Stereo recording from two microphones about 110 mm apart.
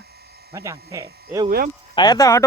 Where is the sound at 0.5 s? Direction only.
25° right (ahead or behind).